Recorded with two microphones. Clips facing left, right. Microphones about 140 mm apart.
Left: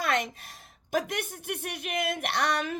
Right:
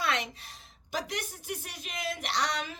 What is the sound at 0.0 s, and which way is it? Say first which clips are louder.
A woman's voice: left 3 dB; 50° left (ahead or behind).